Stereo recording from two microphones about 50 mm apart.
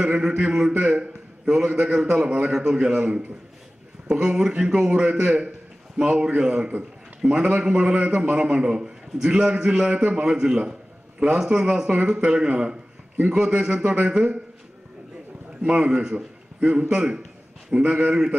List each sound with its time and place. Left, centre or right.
0.4 s a man's voice: centre
15.6 s a man's voice: right
16.5 s a man's voice: right